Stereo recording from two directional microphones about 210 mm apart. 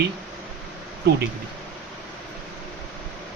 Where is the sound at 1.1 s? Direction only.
55° right (ahead or behind).